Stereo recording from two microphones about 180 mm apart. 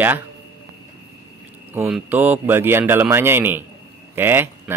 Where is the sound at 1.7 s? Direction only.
10° right (ahead or behind).